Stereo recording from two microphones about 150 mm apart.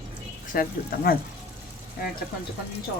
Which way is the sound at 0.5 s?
80° left.